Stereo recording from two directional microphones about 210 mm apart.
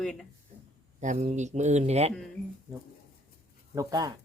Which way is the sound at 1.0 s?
35° right (ahead or behind).